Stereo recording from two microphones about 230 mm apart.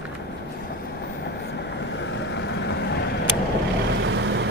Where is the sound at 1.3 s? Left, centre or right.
Left.